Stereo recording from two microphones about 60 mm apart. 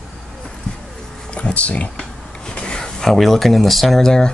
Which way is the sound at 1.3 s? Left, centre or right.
Left.